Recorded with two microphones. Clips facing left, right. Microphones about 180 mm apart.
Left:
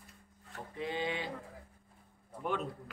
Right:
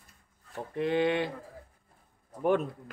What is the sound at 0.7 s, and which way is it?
Speech, 65° right (ahead or behind).